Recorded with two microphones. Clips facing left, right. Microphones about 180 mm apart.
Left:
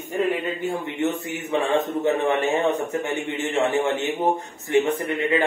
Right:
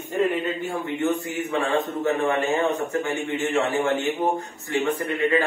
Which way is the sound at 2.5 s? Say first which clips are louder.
Left 1 dB; 20° left (ahead or behind).